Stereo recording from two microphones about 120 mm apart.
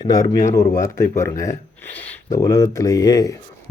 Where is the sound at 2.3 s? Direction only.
25° left (ahead or behind).